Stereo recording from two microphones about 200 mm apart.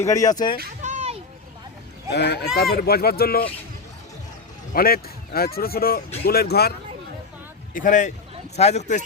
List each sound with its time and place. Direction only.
0.0 s speech: 15° left (ahead or behind)
0.8 s children playing: 35° right (ahead or behind)
2.1 s speech: 55° left (ahead or behind)
4.7 s speech: 50° left (ahead or behind)
7.7 s speech: 40° left (ahead or behind)